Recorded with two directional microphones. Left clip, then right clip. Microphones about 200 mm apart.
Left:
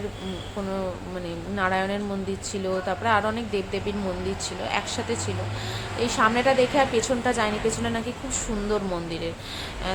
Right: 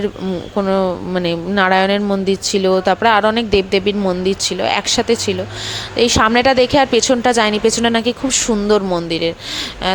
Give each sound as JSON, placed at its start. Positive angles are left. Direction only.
{"t": 0.5, "sound": "a woman's voice", "side_deg": -40}